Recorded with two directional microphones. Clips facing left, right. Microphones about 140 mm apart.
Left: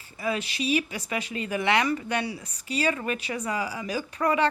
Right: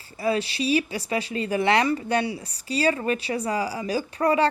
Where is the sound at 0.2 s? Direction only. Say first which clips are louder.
Right 5 dB; 35° right (ahead or behind).